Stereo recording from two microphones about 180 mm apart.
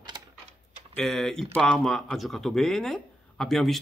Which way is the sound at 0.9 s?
Centre (ahead or behind).